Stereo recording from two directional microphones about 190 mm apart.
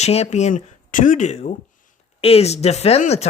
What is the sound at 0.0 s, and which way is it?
Speech, 35° left (ahead or behind).